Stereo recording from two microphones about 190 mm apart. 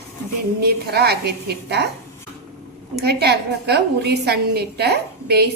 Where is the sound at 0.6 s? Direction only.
55° right (ahead or behind).